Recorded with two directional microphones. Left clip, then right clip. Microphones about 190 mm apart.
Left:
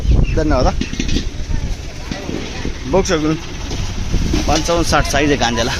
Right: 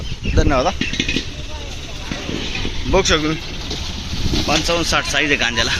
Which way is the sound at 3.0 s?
20° left (ahead or behind).